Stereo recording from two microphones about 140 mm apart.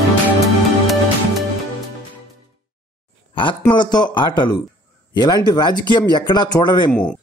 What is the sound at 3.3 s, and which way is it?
Speech, 35° left (ahead or behind).